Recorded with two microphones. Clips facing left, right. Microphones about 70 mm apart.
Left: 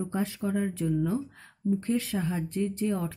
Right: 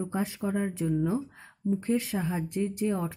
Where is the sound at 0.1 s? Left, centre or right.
Right.